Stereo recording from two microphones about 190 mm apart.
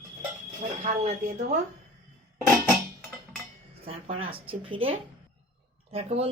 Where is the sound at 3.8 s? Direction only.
30° right (ahead or behind).